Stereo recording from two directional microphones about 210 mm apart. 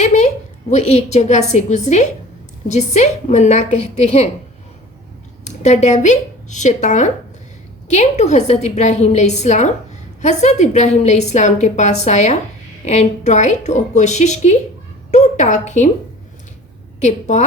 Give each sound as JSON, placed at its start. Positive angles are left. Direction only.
{"t": 0.0, "sound": "a sound", "side_deg": 35}
{"t": 0.7, "sound": "a woman's voice", "side_deg": 30}
{"t": 5.5, "sound": "a woman's voice", "side_deg": 35}
{"t": 17.0, "sound": "a woman's voice", "side_deg": 35}